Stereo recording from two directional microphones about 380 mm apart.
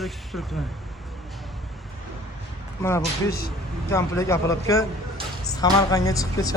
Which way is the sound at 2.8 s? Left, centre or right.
Centre.